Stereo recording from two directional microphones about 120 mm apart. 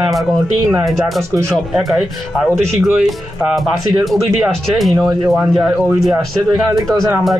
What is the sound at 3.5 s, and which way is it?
Speech, centre (ahead or behind).